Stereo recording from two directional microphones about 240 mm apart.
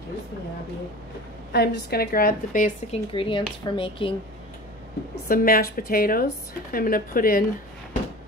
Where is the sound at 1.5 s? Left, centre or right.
Left.